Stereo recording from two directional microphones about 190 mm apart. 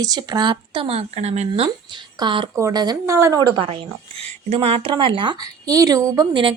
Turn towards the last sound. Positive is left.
turn(degrees=-20)  # may be behind; listen again after turning